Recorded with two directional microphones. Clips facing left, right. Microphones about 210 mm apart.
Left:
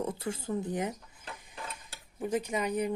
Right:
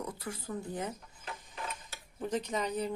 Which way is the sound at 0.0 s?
25° left (ahead or behind).